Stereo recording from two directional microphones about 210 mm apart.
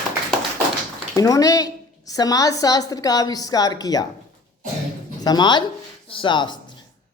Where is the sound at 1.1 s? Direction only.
15° left (ahead or behind).